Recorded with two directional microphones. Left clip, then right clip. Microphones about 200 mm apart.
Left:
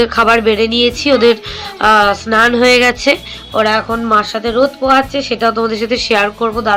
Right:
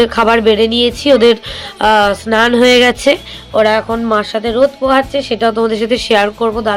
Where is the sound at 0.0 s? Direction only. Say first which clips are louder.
Even; 40° right (ahead or behind).